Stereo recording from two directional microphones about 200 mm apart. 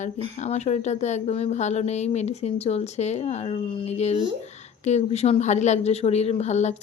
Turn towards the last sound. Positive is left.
turn(degrees=35)  # may be behind; listen again after turning